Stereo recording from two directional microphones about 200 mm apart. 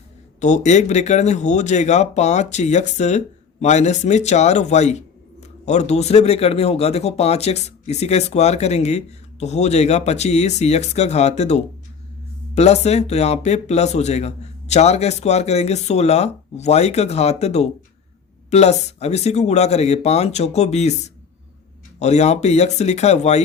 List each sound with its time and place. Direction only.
0.3 s speech: 35° left (ahead or behind)
21.9 s speech: 35° left (ahead or behind)